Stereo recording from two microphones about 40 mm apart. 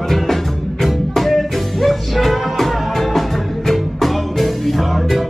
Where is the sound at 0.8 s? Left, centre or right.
Centre.